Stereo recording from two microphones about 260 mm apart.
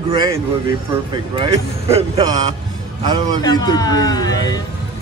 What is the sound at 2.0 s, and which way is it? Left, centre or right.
Speech, centre.